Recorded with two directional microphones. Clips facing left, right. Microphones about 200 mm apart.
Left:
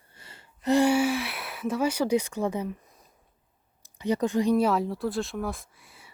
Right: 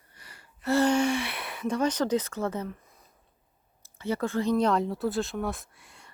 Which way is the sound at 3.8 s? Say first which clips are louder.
Left 3 dB; 15° left (ahead or behind).